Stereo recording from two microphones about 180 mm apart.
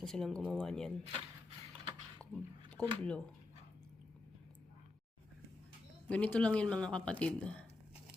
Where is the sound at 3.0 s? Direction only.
5° left (ahead or behind).